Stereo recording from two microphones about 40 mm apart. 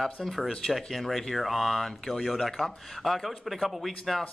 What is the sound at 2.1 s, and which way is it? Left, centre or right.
A man's voice, centre.